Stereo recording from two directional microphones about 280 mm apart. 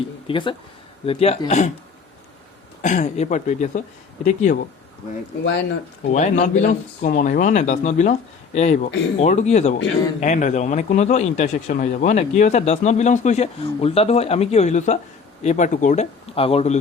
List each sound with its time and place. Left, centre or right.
0.3 s a man's voice: centre
2.8 s a man's voice: left
5.4 s speech: left
6.1 s a man's voice: left